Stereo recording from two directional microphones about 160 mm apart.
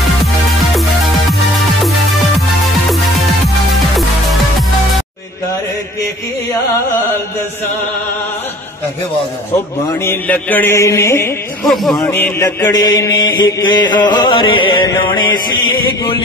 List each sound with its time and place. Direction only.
3.9 s music: centre (ahead or behind)
9.8 s mantra: 10° left (ahead or behind)
11.6 s speech: centre (ahead or behind)
12.0 s mantra: 15° left (ahead or behind)
12.7 s chant: 25° left (ahead or behind)